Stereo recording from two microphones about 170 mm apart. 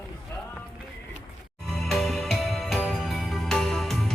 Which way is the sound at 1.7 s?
Centre (ahead or behind).